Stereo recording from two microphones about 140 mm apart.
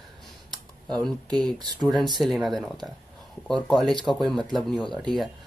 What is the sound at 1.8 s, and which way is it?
Speech, centre (ahead or behind).